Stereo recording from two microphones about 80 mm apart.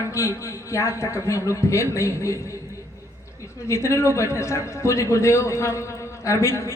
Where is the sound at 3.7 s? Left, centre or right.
Left.